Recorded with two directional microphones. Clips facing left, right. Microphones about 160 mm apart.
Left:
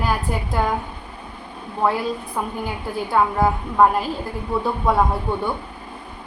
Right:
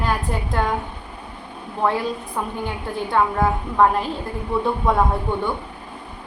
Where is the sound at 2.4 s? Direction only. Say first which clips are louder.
Even; 5° left (ahead or behind).